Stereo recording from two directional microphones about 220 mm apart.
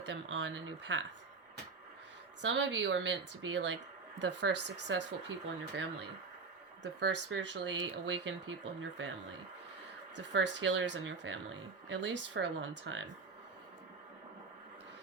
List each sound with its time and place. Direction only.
0.0 s speech: 50° right (ahead or behind)
2.4 s speech: 55° right (ahead or behind)
6.8 s speech: 55° right (ahead or behind)
10.2 s speech: 55° right (ahead or behind)